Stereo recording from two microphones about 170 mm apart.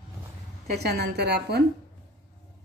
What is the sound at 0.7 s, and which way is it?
Speech, 70° right (ahead or behind).